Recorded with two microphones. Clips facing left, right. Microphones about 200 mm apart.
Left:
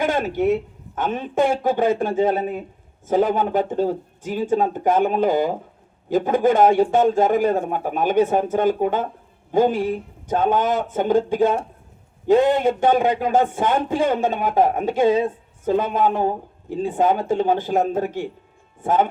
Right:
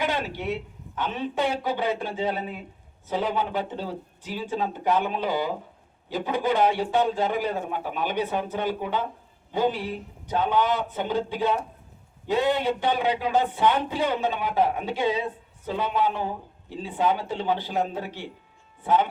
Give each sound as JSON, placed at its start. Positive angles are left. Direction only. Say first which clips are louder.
{"t": 0.0, "sound": "a man's voice", "louder": "left 8 dB", "side_deg": 45}